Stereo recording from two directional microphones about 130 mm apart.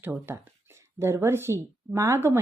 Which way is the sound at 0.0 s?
15° right (ahead or behind).